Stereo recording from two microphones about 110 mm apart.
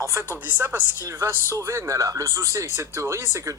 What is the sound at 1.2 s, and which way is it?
Speech, 25° right (ahead or behind).